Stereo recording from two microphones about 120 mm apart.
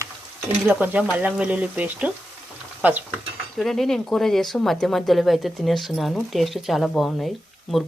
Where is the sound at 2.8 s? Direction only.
15° right (ahead or behind).